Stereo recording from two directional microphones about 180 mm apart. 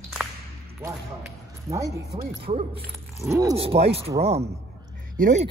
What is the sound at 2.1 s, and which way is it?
Speech, 30° right (ahead or behind).